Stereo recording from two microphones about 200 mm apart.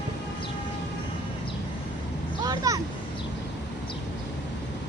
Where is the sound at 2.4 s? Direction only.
20° right (ahead or behind).